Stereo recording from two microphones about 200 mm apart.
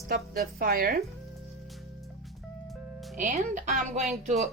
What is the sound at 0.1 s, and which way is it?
Speech, 50° right (ahead or behind).